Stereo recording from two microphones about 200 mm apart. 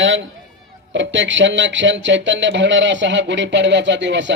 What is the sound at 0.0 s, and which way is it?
Speech, 70° right (ahead or behind).